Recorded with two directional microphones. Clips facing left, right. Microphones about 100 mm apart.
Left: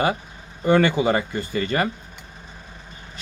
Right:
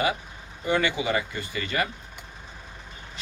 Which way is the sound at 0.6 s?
45° left (ahead or behind).